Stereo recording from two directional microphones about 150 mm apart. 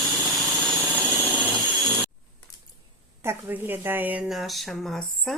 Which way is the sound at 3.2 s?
15° right (ahead or behind).